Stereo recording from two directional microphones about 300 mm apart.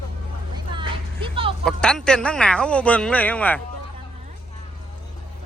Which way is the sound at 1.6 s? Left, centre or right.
Centre.